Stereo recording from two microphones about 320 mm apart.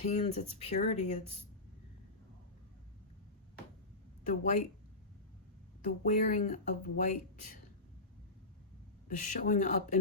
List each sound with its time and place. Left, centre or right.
0.0 s speech: centre
4.3 s speech: left
5.8 s speech: left
9.2 s speech: left